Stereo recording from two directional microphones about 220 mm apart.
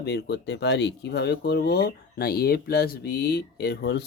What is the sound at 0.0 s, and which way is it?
Speech, 50° left (ahead or behind).